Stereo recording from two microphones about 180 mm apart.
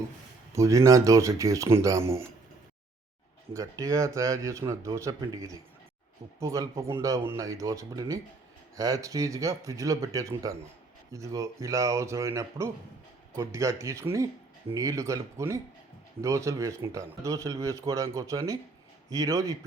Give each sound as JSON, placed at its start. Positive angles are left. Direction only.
{"t": 0.5, "sound": "speech", "side_deg": -20}
{"t": 3.5, "sound": "speech", "side_deg": -15}